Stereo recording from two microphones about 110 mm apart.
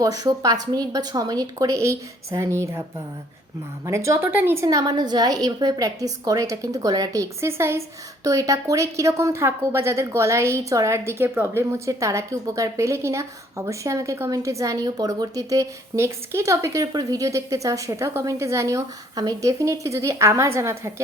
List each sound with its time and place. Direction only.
0.0 s speech: 35° right (ahead or behind)
3.8 s a woman's voice: 25° right (ahead or behind)